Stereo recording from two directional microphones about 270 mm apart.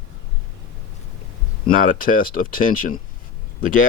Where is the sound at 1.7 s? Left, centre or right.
Left.